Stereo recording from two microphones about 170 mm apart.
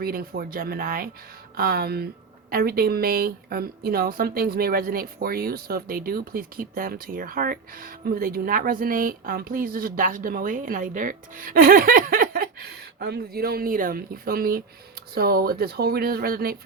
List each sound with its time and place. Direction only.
0.0 s speech: 60° right (ahead or behind)